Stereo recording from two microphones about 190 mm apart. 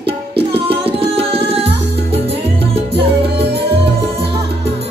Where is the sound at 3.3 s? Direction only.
60° right (ahead or behind).